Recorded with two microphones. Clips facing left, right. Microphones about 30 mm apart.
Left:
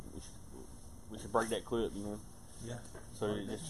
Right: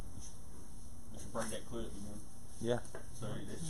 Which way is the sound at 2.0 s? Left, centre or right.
Centre.